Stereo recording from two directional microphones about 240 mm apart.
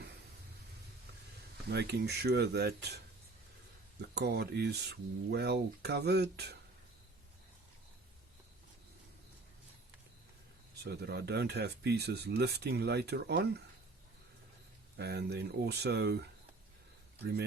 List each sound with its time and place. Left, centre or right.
1.7 s speech: right
4.0 s speech: right
10.8 s speech: right
14.9 s speech: right